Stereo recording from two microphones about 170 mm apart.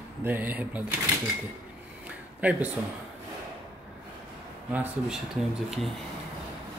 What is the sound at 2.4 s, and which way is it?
Speech, 10° right (ahead or behind).